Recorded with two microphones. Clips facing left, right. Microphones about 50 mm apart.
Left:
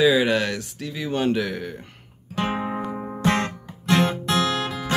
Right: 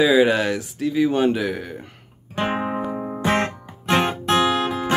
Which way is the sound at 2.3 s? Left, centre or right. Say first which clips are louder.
Right 2 dB; right.